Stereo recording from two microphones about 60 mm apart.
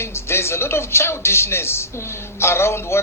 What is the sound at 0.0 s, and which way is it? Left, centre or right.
Speech, left.